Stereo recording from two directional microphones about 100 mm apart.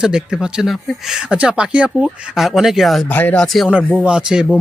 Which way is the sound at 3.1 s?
15° left (ahead or behind).